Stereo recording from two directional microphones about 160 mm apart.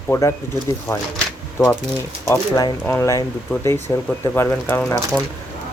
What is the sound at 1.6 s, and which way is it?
Speech, 15° left (ahead or behind).